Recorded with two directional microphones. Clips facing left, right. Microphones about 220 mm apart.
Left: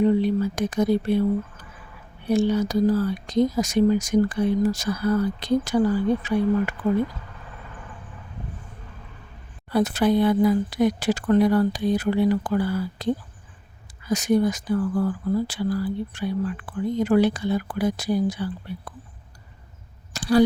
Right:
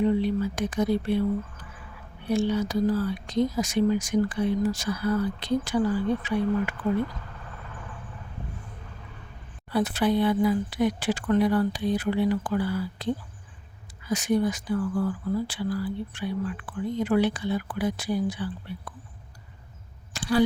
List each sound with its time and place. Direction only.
0.0 s speech: 40° left (ahead or behind)
2.3 s speech: 40° left (ahead or behind)
9.6 s speech: 45° left (ahead or behind)
20.1 s a sound: 40° left (ahead or behind)